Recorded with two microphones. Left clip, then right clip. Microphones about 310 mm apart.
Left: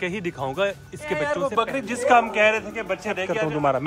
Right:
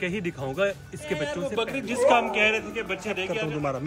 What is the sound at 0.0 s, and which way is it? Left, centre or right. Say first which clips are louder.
A man's voice: left 3 dB; centre.